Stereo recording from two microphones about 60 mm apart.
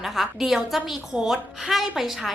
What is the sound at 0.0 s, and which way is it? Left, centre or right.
A woman's voice, centre.